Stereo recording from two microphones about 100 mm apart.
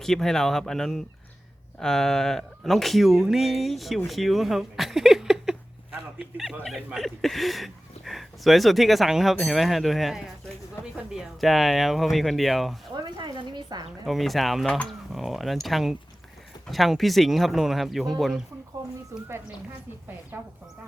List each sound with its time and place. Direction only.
0.0 s speech: 5° left (ahead or behind)
12.9 s a woman's voice: 50° right (ahead or behind)
14.0 s speech: centre (ahead or behind)
19.1 s speech: 30° right (ahead or behind)
20.3 s speech: 25° right (ahead or behind)